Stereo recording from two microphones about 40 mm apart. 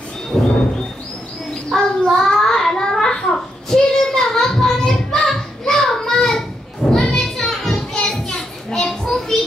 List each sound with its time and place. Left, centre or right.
0.3 s music: centre
1.5 s child singing: centre
6.9 s children playing: centre